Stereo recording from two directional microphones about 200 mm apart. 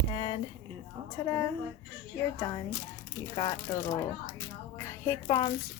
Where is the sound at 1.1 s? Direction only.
20° left (ahead or behind).